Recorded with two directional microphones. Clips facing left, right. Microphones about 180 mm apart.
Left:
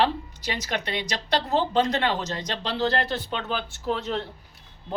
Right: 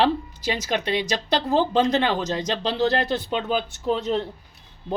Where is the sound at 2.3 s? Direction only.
20° right (ahead or behind).